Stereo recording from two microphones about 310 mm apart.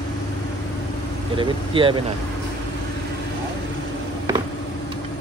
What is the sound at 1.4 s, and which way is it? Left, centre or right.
Speech, centre.